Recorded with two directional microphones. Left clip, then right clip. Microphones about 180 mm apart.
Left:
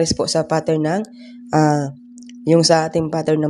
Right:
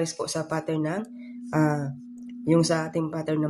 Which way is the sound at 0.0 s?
40° left (ahead or behind).